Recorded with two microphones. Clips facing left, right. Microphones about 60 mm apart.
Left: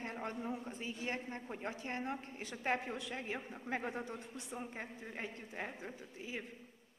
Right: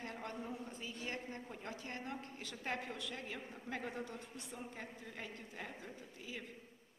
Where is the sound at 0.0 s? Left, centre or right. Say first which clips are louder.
Left 4 dB; left.